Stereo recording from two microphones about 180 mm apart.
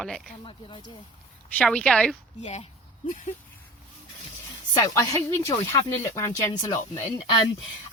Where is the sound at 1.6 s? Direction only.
5° left (ahead or behind).